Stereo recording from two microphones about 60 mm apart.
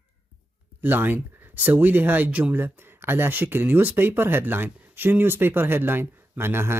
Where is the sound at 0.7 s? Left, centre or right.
Right.